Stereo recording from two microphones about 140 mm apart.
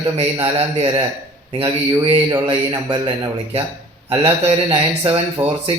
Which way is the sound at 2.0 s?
35° right (ahead or behind).